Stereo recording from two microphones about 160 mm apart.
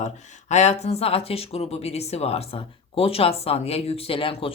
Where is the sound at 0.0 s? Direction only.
45° left (ahead or behind).